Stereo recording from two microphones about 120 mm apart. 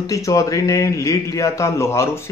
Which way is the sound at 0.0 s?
30° left (ahead or behind).